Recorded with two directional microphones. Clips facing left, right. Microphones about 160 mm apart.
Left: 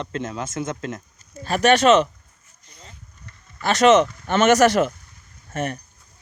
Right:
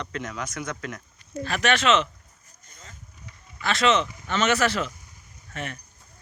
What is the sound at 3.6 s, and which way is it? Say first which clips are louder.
Speech: left 7 dB; 45° left (ahead or behind).